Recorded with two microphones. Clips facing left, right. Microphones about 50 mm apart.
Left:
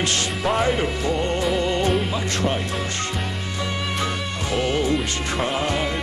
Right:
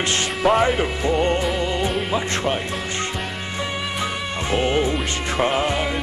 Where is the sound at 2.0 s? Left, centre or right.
Centre.